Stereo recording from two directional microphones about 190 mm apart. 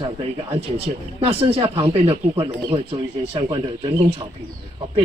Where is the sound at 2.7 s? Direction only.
30° right (ahead or behind).